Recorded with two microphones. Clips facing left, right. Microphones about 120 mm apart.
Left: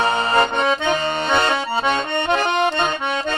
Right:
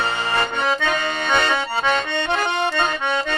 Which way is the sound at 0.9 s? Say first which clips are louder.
Left 2 dB; 30° left (ahead or behind).